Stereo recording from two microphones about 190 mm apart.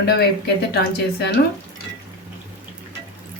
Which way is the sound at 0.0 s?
60° left (ahead or behind).